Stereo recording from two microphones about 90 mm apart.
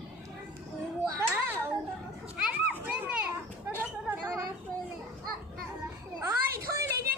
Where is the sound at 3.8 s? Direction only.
25° right (ahead or behind).